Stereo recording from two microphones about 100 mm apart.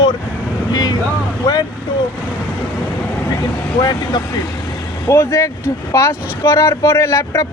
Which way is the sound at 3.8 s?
40° left (ahead or behind).